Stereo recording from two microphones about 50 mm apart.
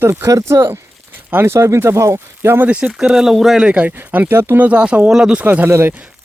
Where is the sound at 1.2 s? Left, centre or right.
Right.